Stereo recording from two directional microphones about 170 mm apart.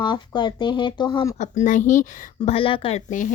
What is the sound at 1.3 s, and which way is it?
Speech, 45° left (ahead or behind).